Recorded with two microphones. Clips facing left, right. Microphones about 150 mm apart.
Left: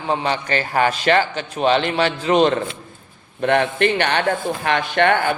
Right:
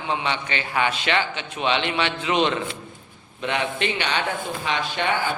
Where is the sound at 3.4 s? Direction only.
50° left (ahead or behind).